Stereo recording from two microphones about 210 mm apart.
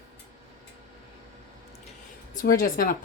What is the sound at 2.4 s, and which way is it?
Speech, 45° left (ahead or behind).